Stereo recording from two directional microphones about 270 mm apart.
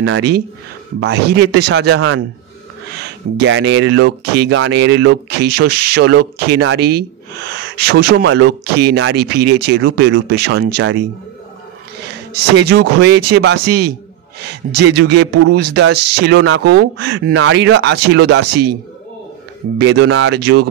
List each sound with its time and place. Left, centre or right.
0.0 s speech: right
12.5 s speech: right
19.8 s speech: right